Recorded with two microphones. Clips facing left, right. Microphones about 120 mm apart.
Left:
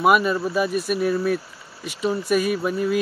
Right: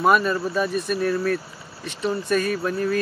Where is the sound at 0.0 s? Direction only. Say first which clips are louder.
Left 1 dB; 5° left (ahead or behind).